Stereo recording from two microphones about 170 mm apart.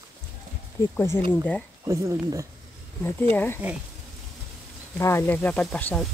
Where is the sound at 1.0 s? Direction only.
15° left (ahead or behind).